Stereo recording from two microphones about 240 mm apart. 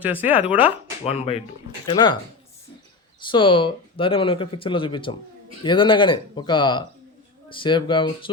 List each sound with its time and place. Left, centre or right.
0.0 s speech: centre
0.5 s speech: left
3.3 s speech: left